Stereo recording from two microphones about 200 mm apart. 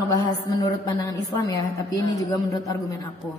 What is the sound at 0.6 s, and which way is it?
A woman's voice, 20° left (ahead or behind).